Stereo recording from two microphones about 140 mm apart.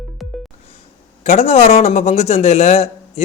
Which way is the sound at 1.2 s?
50° left (ahead or behind).